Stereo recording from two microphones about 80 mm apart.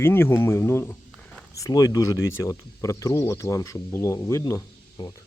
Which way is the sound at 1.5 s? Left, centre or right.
Left.